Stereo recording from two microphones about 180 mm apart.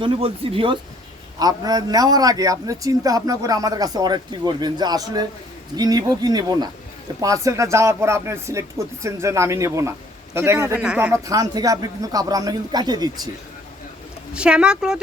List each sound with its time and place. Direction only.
0.0 s a man's voice: 30° right (ahead or behind); by 11.2 s 5° right (ahead or behind)
11.3 s a man's voice: 20° right (ahead or behind)
14.3 s speech: 5° right (ahead or behind)